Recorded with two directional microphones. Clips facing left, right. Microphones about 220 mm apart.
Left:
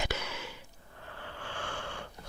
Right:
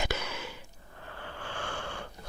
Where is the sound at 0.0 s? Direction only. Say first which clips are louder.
Right 2 dB; 60° right (ahead or behind).